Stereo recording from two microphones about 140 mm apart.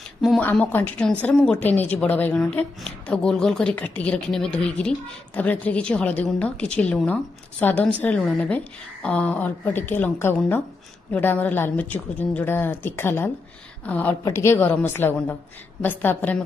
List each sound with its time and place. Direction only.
0.4 s speech: 10° left (ahead or behind)